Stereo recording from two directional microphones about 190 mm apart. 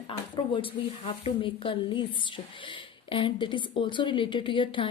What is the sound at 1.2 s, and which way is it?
Speech, 25° left (ahead or behind).